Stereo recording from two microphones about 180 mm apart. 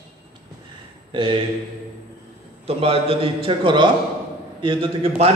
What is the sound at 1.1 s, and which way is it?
Speech, 30° right (ahead or behind).